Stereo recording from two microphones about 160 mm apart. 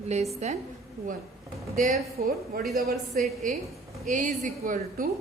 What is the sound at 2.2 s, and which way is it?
Speech, 70° right (ahead or behind).